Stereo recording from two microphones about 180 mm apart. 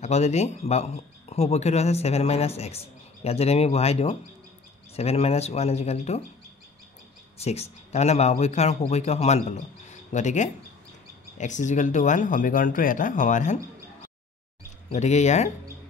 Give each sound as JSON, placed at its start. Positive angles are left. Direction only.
{"t": 0.0, "sound": "speech", "side_deg": 40}
{"t": 7.3, "sound": "speech", "side_deg": 35}
{"t": 15.0, "sound": "speech", "side_deg": 40}